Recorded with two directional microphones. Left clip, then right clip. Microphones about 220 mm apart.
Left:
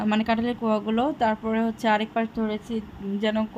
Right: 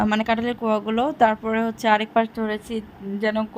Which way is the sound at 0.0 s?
25° right (ahead or behind).